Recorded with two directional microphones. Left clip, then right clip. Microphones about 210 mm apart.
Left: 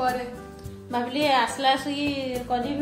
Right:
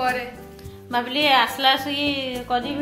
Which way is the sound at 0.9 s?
5° right (ahead or behind).